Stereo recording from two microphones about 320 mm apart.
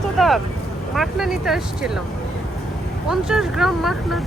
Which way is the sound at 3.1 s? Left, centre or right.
Centre.